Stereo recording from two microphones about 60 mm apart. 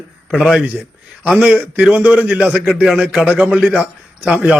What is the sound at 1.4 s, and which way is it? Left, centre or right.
A man's voice, right.